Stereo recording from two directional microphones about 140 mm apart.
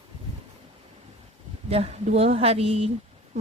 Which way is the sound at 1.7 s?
50° right (ahead or behind).